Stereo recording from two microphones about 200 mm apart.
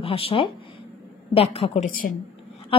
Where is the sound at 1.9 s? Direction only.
45° left (ahead or behind).